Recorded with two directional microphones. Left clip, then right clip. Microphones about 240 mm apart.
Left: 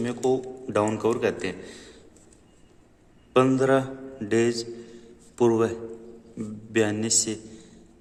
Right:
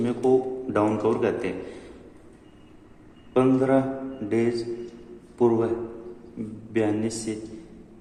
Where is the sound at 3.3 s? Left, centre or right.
Left.